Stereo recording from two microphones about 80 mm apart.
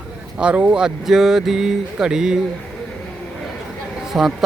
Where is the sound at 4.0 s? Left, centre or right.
Centre.